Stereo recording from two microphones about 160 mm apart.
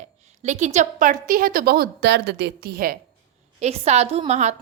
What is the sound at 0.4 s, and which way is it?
A woman's voice, 45° right (ahead or behind).